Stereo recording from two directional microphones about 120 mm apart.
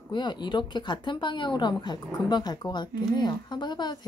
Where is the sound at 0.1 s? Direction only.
40° left (ahead or behind).